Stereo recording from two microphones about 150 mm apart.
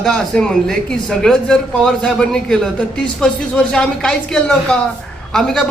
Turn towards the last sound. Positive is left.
turn(degrees=5)  # may be behind; listen again after turning